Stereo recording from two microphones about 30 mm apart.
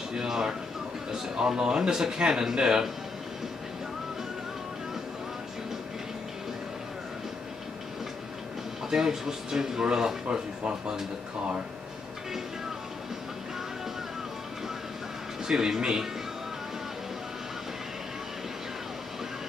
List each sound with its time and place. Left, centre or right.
0.1 s speech: right
8.9 s speech: centre
15.4 s speech: centre